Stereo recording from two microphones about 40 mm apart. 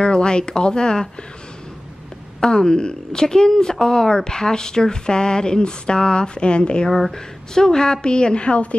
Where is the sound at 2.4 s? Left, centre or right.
Centre.